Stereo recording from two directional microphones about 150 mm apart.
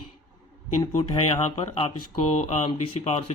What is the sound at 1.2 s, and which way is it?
Speech, 40° left (ahead or behind).